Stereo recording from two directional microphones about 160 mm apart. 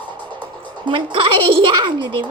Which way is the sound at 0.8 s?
30° right (ahead or behind).